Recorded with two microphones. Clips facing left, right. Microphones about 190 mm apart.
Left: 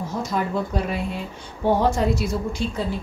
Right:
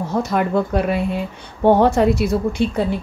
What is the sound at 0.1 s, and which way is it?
A woman's voice, 65° right (ahead or behind).